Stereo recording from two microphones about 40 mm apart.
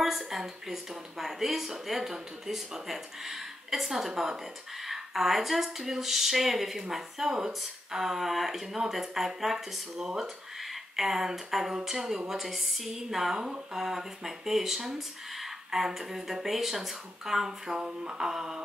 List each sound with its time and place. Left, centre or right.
0.0 s speech: centre
18.0 s music: right
18.3 s speech: centre